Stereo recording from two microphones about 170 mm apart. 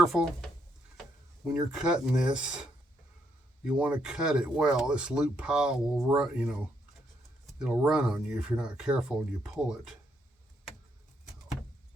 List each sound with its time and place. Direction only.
0.1 s speech: centre (ahead or behind)
1.5 s speech: 5° right (ahead or behind)
7.6 s speech: 5° right (ahead or behind)